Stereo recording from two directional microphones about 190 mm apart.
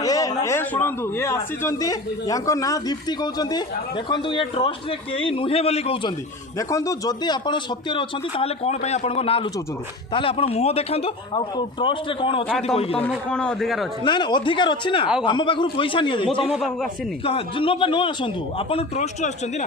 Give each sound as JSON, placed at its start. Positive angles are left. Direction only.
{"t": 0.0, "sound": "a man's voice", "side_deg": 20}
{"t": 6.6, "sound": "a man's voice", "side_deg": 15}
{"t": 13.0, "sound": "a man's voice", "side_deg": 5}
{"t": 14.0, "sound": "a man's voice", "side_deg": 25}
{"t": 16.5, "sound": "a man's voice", "side_deg": 0}
{"t": 17.2, "sound": "a man's voice", "side_deg": 30}